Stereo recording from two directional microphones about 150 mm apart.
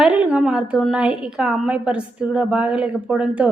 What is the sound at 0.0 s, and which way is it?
A woman's voice, 10° right (ahead or behind).